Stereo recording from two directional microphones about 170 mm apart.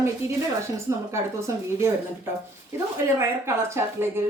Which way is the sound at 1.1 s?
15° right (ahead or behind).